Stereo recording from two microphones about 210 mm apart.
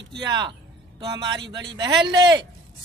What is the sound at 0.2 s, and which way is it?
Speech, 20° right (ahead or behind).